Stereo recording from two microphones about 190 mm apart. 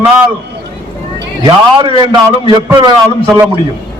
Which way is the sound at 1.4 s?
25° right (ahead or behind).